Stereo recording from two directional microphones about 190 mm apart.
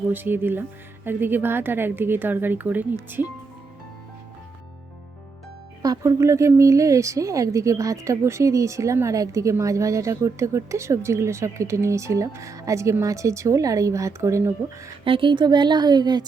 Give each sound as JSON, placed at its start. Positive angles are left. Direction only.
{"t": 0.1, "sound": "speech", "side_deg": -10}
{"t": 5.8, "sound": "speech", "side_deg": -15}
{"t": 15.0, "sound": "a woman's voice", "side_deg": -25}